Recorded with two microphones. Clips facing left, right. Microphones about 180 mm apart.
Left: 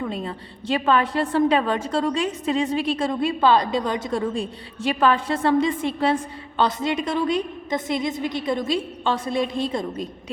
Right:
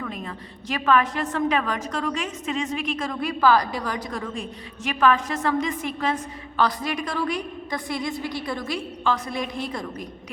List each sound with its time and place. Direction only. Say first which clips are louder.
0.0 s a woman's voice: left 5 dB; 30° left (ahead or behind)